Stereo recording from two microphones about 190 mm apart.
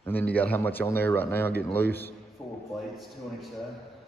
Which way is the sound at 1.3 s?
55° left (ahead or behind).